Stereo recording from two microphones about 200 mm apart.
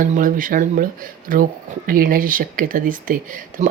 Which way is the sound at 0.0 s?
40° right (ahead or behind).